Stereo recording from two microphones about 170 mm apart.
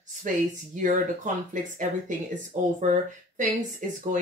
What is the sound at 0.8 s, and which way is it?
Speech, 50° right (ahead or behind).